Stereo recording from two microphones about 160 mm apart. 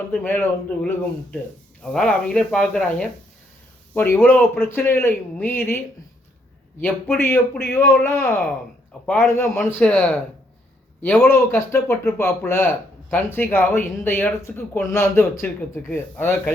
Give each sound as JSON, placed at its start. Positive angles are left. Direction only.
{"t": 0.1, "sound": "speech", "side_deg": 10}
{"t": 6.8, "sound": "speech", "side_deg": 10}